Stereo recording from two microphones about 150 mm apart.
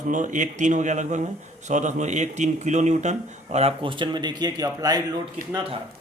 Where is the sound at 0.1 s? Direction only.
55° right (ahead or behind); by 5.0 s 25° right (ahead or behind).